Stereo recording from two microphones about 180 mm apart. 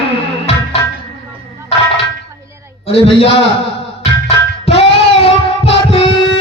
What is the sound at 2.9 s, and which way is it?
Speech, 30° left (ahead or behind).